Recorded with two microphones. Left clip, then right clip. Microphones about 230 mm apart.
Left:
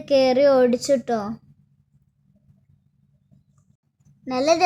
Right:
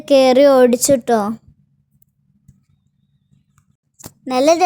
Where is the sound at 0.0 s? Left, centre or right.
Right.